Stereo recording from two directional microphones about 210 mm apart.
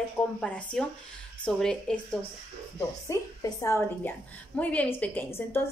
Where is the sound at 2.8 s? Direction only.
15° left (ahead or behind).